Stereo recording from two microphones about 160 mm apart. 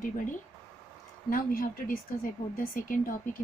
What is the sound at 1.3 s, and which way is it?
A woman's voice, 60° left (ahead or behind).